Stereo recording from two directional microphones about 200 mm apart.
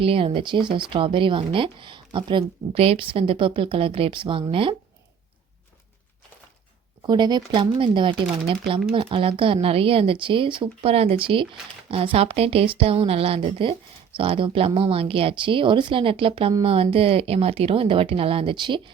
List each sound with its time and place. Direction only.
0.0 s speech: 30° right (ahead or behind)
7.1 s speech: 20° right (ahead or behind)